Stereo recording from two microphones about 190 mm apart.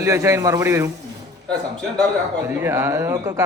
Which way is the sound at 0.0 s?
15° right (ahead or behind).